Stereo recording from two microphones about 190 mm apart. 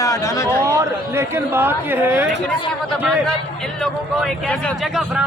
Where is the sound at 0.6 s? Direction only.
15° right (ahead or behind).